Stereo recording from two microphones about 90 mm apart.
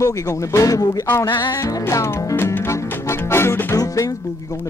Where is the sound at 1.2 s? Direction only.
55° left (ahead or behind).